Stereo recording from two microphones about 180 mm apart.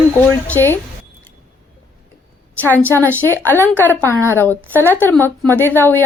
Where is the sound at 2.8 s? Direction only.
10° left (ahead or behind).